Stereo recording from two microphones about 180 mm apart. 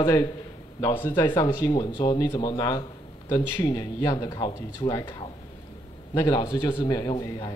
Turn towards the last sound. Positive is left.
turn(degrees=20)  # may be behind; listen again after turning